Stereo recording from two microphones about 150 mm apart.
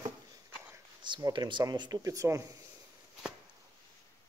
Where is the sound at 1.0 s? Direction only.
30° right (ahead or behind).